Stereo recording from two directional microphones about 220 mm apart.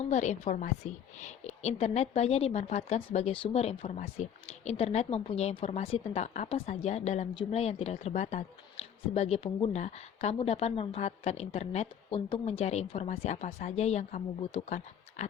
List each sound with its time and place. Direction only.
0.0 s a woman's voice: 30° left (ahead or behind)